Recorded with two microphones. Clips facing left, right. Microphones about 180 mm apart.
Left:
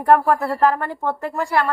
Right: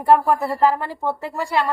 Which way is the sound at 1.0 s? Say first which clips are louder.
Left 1 dB; 15° right (ahead or behind).